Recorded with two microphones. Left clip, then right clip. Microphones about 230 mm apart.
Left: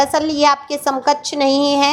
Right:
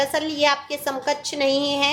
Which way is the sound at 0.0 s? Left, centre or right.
Left.